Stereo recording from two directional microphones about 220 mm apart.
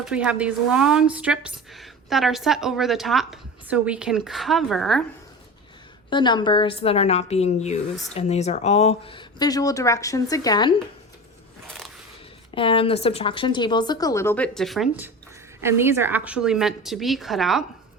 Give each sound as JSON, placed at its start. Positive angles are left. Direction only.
{"t": 0.0, "sound": "a woman's voice", "side_deg": -5}
{"t": 6.1, "sound": "speech", "side_deg": 20}
{"t": 12.5, "sound": "a woman's voice", "side_deg": 25}